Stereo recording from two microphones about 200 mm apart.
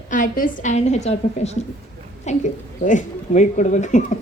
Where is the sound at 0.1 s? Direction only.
45° left (ahead or behind).